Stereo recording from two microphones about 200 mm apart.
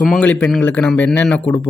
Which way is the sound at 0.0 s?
5° left (ahead or behind).